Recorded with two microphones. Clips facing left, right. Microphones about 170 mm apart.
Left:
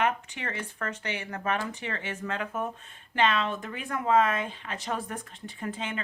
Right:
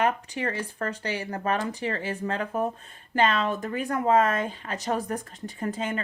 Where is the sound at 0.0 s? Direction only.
35° right (ahead or behind).